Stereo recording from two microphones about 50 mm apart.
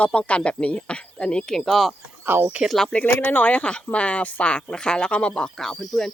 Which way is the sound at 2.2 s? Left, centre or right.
Right.